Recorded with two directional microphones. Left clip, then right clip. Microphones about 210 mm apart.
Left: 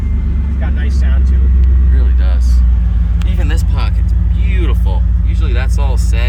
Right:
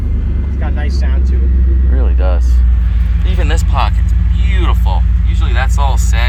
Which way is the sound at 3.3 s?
10° left (ahead or behind).